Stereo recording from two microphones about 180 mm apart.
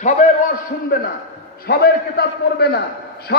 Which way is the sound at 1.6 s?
60° left (ahead or behind).